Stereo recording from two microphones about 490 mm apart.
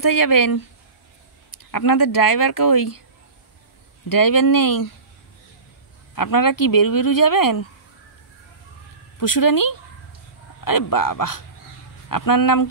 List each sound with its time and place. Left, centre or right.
0.0 s speech: left
1.7 s speech: left
4.1 s speech: left
6.1 s speech: left
9.2 s speech: left